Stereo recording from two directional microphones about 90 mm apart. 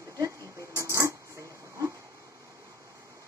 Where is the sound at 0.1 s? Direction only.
40° right (ahead or behind).